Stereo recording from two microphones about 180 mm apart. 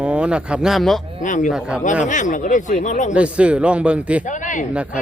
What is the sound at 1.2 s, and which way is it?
Speech, 45° left (ahead or behind).